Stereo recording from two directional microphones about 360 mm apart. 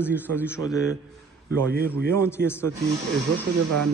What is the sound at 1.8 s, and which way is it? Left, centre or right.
Speech, centre.